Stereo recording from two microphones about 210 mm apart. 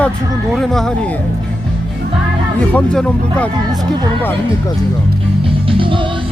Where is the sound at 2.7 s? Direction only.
5° left (ahead or behind).